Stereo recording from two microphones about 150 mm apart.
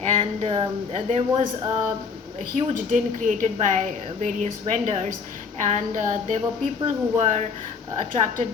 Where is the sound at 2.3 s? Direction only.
60° right (ahead or behind).